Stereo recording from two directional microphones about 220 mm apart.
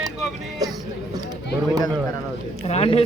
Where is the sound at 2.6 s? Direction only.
25° left (ahead or behind).